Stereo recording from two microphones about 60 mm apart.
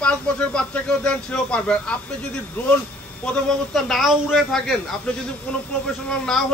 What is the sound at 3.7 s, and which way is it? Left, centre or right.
Speech, centre.